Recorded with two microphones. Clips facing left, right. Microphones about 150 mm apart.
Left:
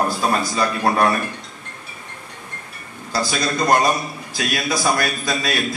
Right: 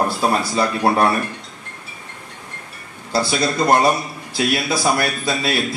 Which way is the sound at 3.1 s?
25° right (ahead or behind).